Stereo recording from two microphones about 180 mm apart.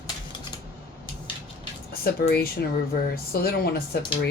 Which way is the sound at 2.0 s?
60° left (ahead or behind).